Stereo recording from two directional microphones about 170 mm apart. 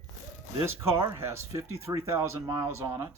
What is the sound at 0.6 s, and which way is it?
Speech, 15° right (ahead or behind).